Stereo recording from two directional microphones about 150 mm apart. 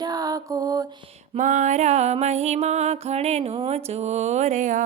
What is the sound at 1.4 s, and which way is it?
Music, 55° right (ahead or behind).